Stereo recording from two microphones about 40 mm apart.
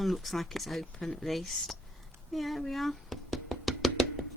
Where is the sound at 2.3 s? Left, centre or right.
Centre.